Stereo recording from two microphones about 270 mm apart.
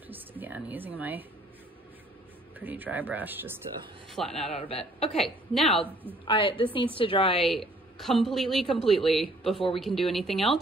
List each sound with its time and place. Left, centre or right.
0.1 s a sound: centre
2.6 s a woman's voice: centre
4.5 s a man's voice: left
5.2 s a woman's voice: centre
6.2 s a man's voice: centre
7.4 s a woman's voice: centre